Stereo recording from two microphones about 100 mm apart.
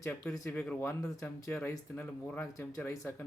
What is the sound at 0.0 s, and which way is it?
Speech, 10° left (ahead or behind).